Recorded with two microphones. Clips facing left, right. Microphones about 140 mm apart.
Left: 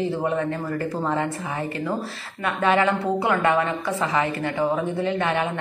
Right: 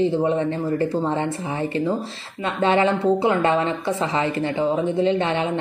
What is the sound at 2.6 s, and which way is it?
A woman's voice, 25° right (ahead or behind).